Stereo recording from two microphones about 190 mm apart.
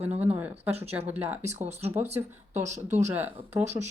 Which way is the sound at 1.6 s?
35° right (ahead or behind).